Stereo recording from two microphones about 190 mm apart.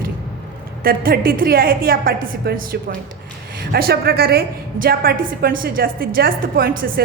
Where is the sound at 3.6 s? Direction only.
55° right (ahead or behind).